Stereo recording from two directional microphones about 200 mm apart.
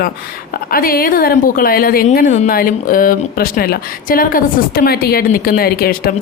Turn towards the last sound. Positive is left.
turn(degrees=50)  # may be behind; listen again after turning